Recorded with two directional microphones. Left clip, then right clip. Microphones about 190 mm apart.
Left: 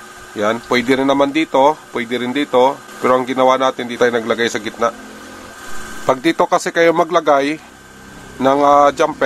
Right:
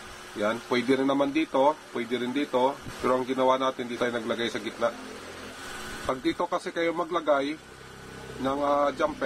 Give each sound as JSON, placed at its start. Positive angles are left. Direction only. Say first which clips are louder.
{"t": 0.4, "sound": "a man's voice", "louder": "left 11 dB", "side_deg": 30}
{"t": 6.0, "sound": "a man's voice", "louder": "left 14 dB", "side_deg": 35}